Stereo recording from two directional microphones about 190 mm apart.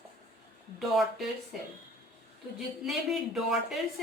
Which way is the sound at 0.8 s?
Centre (ahead or behind).